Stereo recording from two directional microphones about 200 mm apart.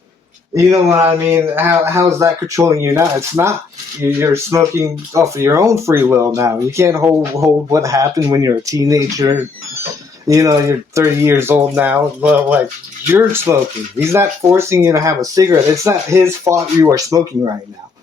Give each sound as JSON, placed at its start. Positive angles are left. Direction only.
{"t": 0.5, "sound": "speech", "side_deg": -15}